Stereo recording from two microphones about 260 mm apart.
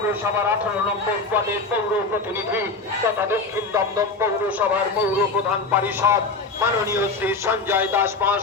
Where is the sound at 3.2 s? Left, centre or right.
Centre.